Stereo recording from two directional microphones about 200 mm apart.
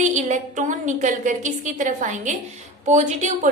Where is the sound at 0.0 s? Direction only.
35° right (ahead or behind).